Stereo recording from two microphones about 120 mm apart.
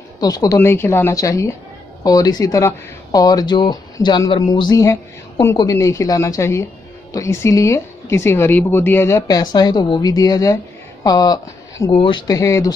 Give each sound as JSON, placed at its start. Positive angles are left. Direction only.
{"t": 0.2, "sound": "speech", "side_deg": 30}
{"t": 0.6, "sound": "a woman's voice", "side_deg": 20}
{"t": 9.4, "sound": "speech", "side_deg": 35}
{"t": 11.9, "sound": "speech", "side_deg": 45}
{"t": 12.3, "sound": "a woman's voice", "side_deg": 25}